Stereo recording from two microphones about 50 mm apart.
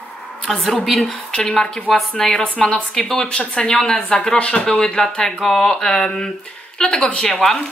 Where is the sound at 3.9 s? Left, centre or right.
Centre.